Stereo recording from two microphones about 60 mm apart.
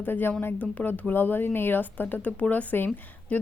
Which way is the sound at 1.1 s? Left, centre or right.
Left.